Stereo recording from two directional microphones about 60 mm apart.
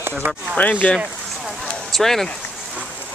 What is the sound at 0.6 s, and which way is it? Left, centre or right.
Speech, left.